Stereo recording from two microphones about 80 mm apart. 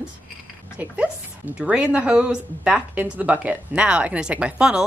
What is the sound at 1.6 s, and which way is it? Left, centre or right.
A woman's voice, centre.